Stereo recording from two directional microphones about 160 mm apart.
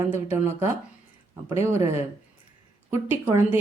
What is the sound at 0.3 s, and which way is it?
Speech, 15° right (ahead or behind).